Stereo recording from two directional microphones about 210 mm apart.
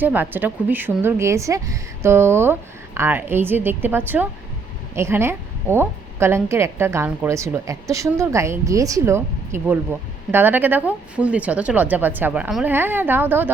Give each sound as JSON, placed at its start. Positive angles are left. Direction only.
{"t": 0.0, "sound": "a woman's voice", "side_deg": -10}